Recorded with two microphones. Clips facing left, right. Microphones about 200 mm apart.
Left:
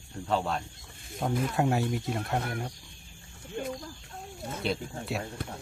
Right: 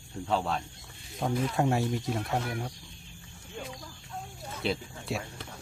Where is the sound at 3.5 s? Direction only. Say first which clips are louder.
Left 7 dB; 50° left (ahead or behind).